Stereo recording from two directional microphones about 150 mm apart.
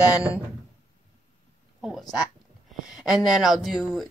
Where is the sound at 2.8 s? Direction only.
5° right (ahead or behind).